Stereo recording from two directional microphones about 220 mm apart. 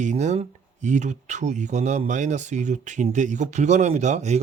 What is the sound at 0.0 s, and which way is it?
Speech, 30° right (ahead or behind).